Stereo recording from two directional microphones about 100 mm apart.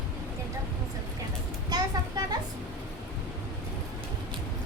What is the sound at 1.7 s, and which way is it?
Children playing, 40° right (ahead or behind).